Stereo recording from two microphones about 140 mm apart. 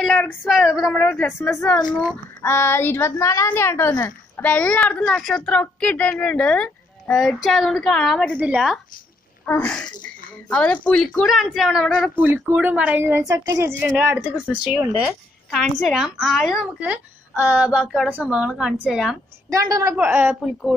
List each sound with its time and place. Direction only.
0.0 s a woman's voice: 5° left (ahead or behind)
2.4 s a woman's voice: 15° left (ahead or behind)
8.4 s speech: 10° right (ahead or behind)
9.5 s a woman's voice: 10° left (ahead or behind)
12.2 s a woman's voice: 15° right (ahead or behind)
19.5 s a woman's voice: 25° right (ahead or behind)
20.0 s speech: 10° right (ahead or behind)